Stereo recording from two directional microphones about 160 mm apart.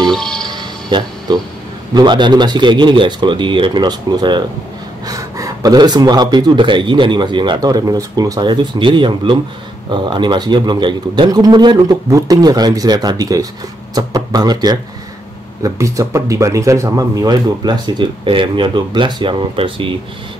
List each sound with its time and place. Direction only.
0.0 s music: 5° left (ahead or behind)
0.5 s music: 25° right (ahead or behind)
2.0 s speech: 30° right (ahead or behind)